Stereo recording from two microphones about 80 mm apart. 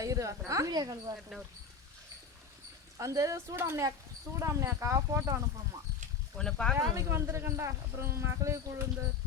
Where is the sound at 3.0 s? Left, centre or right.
Right.